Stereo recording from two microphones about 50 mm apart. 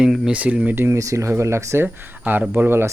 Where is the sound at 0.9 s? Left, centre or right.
Right.